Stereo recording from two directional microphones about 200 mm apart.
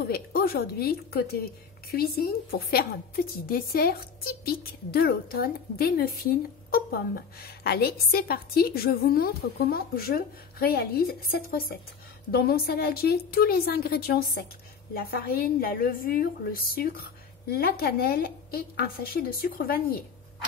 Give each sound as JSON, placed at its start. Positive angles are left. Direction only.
{"t": 0.0, "sound": "a woman's voice", "side_deg": 50}